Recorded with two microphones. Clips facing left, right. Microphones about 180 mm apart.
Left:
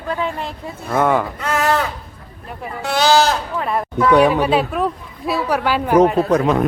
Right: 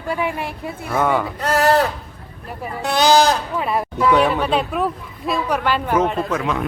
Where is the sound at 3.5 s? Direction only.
5° right (ahead or behind).